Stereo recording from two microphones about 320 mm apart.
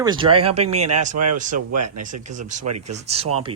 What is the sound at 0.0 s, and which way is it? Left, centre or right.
Speech, centre.